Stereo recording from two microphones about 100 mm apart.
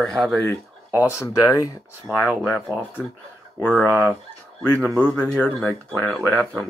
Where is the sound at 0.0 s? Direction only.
5° left (ahead or behind).